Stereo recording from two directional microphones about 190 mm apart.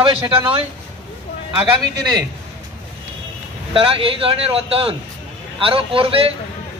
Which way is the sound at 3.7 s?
30° right (ahead or behind).